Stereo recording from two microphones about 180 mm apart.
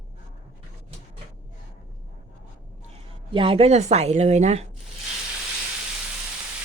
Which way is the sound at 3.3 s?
30° right (ahead or behind).